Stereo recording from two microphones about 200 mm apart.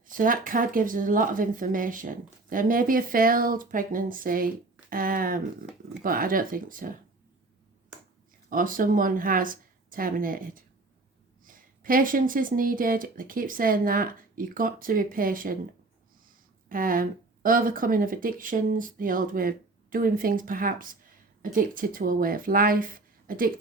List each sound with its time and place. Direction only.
0.1 s speech: 45° right (ahead or behind)
8.4 s speech: 45° right (ahead or behind)
16.6 s speech: 45° right (ahead or behind)